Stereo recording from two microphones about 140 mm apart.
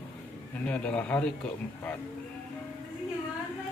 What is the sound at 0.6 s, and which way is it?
Speech, 10° left (ahead or behind).